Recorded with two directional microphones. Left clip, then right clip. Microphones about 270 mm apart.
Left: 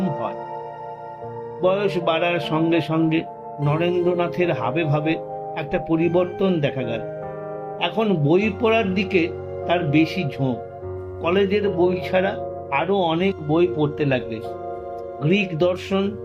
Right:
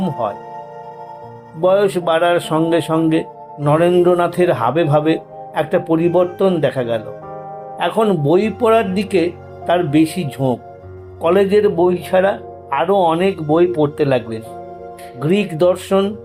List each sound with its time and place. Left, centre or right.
1.6 s a man's voice: centre